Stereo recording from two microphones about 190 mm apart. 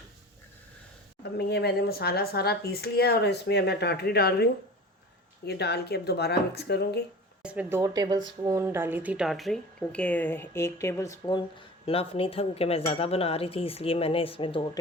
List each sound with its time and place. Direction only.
1.4 s speech: 60° left (ahead or behind)
5.5 s speech: 60° left (ahead or behind)
7.4 s speech: 5° right (ahead or behind)
7.8 s speech: 20° right (ahead or behind); by 11.3 s 15° left (ahead or behind)
11.9 s speech: 30° left (ahead or behind)